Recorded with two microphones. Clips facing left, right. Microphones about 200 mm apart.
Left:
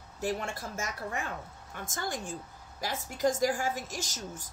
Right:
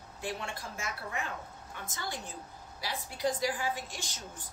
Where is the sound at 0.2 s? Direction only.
45° left (ahead or behind).